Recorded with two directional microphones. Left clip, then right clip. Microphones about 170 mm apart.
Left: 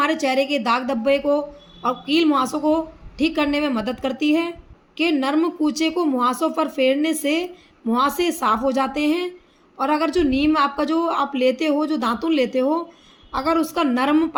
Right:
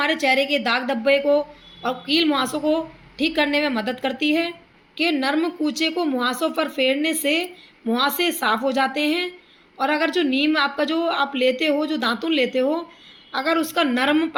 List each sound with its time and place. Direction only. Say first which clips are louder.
0.0 s a woman's voice: even; 50° left (ahead or behind)